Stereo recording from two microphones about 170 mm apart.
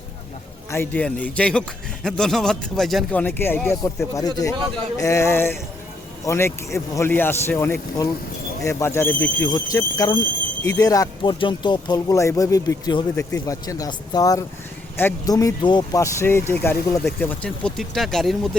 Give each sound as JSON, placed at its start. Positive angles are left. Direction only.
{"t": 0.7, "sound": "speech", "side_deg": 10}
{"t": 9.5, "sound": "speech", "side_deg": 20}